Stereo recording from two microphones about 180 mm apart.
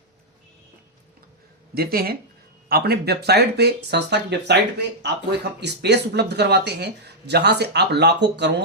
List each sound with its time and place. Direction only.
1.7 s speech: 55° right (ahead or behind); by 8.6 s 75° right (ahead or behind)